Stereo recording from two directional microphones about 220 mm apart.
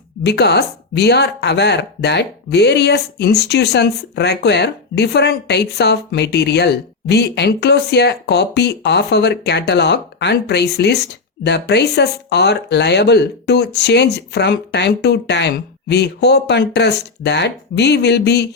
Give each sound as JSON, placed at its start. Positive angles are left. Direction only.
{"t": 0.3, "sound": "speech", "side_deg": 50}